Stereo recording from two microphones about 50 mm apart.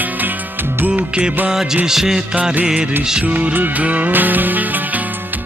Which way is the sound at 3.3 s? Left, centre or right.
Right.